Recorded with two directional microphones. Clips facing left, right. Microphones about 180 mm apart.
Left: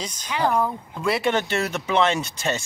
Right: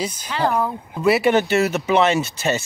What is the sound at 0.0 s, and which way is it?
Speech, 10° right (ahead or behind).